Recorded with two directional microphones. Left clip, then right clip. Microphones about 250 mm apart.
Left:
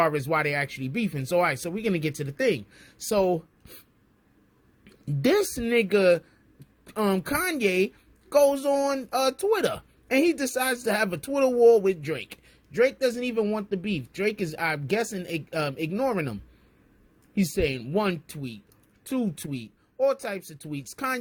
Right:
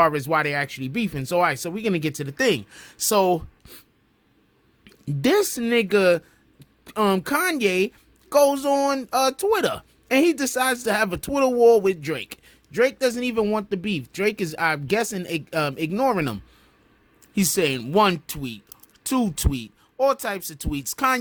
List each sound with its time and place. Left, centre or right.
0.0 s a woman's voice: centre
5.0 s a woman's voice: centre